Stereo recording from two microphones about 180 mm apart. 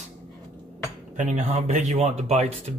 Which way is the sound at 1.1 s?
40° right (ahead or behind).